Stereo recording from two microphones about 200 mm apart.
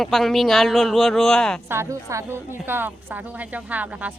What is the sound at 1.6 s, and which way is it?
A woman's voice, 10° right (ahead or behind).